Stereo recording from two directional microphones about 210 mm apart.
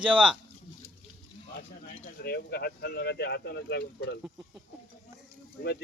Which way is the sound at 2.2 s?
45° left (ahead or behind).